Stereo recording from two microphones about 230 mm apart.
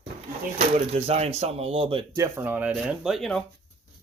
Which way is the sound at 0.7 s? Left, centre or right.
Right.